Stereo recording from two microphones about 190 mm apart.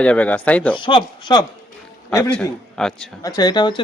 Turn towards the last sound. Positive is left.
turn(degrees=25)  # may be behind; listen again after turning